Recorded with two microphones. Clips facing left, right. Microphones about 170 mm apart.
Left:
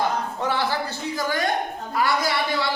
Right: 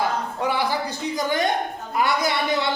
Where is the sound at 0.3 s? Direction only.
10° right (ahead or behind).